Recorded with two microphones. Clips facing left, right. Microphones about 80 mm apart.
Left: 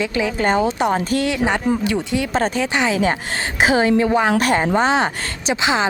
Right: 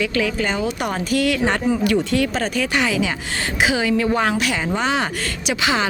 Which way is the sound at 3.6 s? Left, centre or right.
Left.